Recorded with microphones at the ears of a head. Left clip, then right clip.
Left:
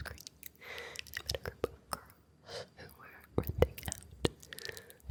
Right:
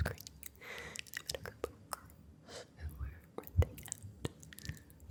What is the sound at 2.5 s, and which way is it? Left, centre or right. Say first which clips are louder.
Whispering: left 6 dB; left.